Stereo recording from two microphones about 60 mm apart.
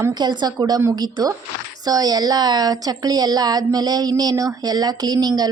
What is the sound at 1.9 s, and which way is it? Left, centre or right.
A woman's voice, right.